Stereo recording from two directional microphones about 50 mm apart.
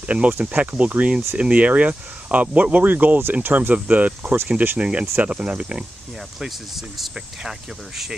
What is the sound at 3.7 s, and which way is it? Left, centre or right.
Speech, right.